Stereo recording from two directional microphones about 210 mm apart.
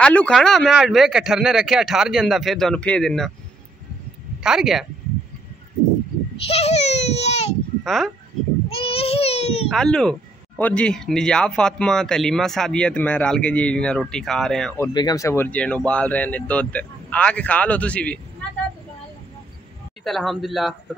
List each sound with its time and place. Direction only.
0.0 s speech: 5° left (ahead or behind)
4.4 s speech: centre (ahead or behind)
6.4 s a child's voice: 30° left (ahead or behind)
7.8 s speech: centre (ahead or behind)
8.6 s a child's voice: 25° left (ahead or behind)
9.7 s speech: 5° left (ahead or behind)
14.8 s speech: 15° left (ahead or behind)
20.0 s speech: centre (ahead or behind)